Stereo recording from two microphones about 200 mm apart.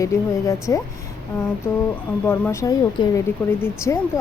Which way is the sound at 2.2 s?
10° left (ahead or behind).